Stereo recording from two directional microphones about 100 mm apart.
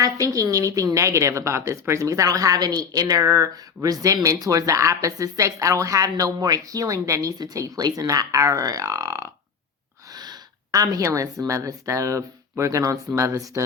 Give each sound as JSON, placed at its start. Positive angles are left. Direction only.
{"t": 0.0, "sound": "a woman's voice", "side_deg": -35}
{"t": 10.1, "sound": "a woman's voice", "side_deg": -45}